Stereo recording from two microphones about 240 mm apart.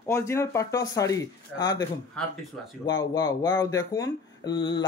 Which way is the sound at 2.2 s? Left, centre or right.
Centre.